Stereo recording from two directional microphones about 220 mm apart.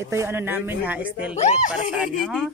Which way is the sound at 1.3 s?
30° left (ahead or behind).